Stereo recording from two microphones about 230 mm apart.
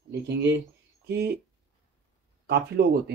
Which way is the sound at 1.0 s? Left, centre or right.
Right.